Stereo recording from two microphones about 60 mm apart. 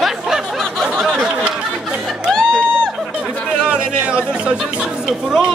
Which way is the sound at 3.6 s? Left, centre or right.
Centre.